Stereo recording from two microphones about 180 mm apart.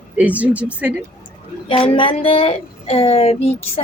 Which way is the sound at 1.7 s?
30° left (ahead or behind).